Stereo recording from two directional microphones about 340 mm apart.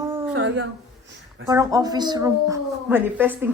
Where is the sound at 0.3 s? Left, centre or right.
Right.